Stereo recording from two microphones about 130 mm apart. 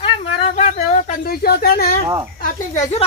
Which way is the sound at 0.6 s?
60° left (ahead or behind).